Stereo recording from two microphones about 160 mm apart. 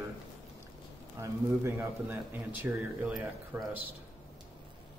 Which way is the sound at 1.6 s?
15° right (ahead or behind).